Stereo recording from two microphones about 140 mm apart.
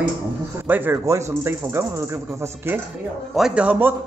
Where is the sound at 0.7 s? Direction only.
15° right (ahead or behind).